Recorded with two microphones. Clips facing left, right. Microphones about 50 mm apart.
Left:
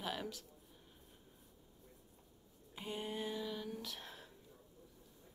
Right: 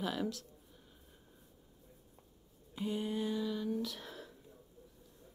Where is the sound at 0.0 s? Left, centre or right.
Centre.